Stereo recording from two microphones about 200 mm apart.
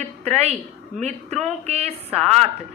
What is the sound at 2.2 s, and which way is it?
Speech, 5° left (ahead or behind).